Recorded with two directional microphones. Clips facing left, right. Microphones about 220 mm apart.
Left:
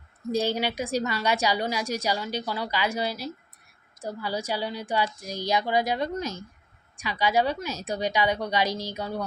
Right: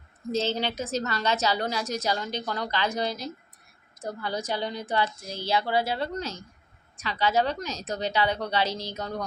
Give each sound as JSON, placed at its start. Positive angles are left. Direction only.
{"t": 0.3, "sound": "a woman's voice", "side_deg": 10}